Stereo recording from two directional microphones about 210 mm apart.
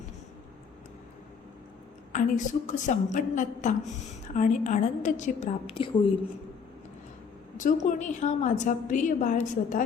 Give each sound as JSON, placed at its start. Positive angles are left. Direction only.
{"t": 2.1, "sound": "a woman's voice", "side_deg": 35}
{"t": 7.6, "sound": "a woman's voice", "side_deg": 35}